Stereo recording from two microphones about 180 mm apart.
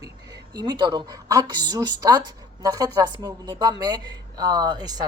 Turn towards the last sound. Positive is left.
turn(degrees=-20)  # may be behind; listen again after turning